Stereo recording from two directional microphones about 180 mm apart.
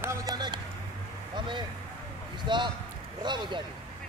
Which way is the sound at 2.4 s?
25° right (ahead or behind).